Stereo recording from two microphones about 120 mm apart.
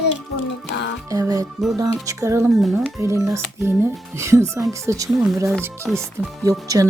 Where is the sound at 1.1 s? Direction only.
30° right (ahead or behind).